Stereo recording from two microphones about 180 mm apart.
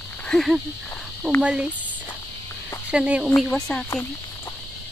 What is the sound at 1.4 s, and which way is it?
Speech, 5° right (ahead or behind).